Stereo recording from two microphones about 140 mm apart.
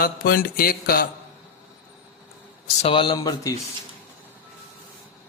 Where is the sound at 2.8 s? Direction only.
40° left (ahead or behind).